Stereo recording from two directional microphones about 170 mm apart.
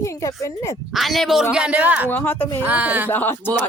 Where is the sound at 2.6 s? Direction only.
10° right (ahead or behind).